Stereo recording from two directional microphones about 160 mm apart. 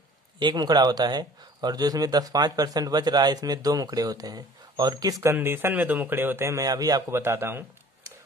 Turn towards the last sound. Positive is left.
turn(degrees=-15)  # may be behind; listen again after turning